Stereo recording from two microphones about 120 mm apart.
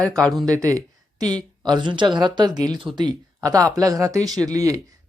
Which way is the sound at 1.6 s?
40° right (ahead or behind).